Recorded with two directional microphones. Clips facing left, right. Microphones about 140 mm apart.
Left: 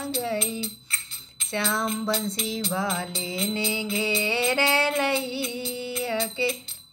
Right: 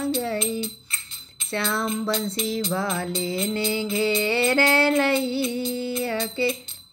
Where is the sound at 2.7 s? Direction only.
15° left (ahead or behind).